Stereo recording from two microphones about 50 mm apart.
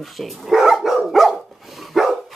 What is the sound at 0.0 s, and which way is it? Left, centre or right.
Dog, centre.